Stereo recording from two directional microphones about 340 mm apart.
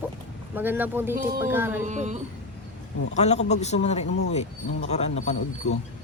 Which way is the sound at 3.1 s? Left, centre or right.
Centre.